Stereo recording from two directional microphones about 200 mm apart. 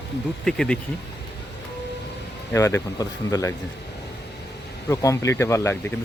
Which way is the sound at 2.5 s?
15° left (ahead or behind).